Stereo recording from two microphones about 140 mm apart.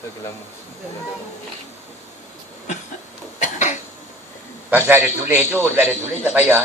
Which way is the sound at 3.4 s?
60° left (ahead or behind).